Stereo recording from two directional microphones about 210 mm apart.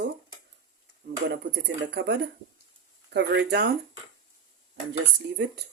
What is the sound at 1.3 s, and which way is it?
Speech, 55° right (ahead or behind).